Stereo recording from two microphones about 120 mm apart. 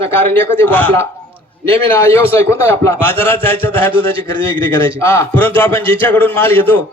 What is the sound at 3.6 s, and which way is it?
A man's voice, 15° left (ahead or behind).